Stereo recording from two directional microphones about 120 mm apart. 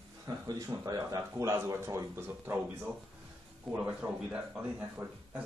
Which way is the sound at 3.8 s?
10° right (ahead or behind).